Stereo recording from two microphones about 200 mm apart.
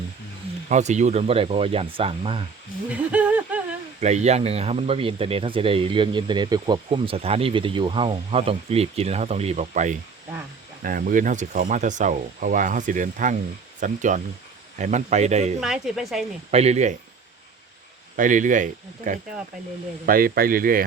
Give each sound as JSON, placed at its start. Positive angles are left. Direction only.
{"t": 0.7, "sound": "speech", "side_deg": -35}
{"t": 2.9, "sound": "a sound", "side_deg": -5}
{"t": 4.0, "sound": "speech", "side_deg": -35}
{"t": 15.6, "sound": "a woman's voice", "side_deg": 0}
{"t": 16.5, "sound": "speech", "side_deg": -30}
{"t": 18.2, "sound": "speech", "side_deg": -40}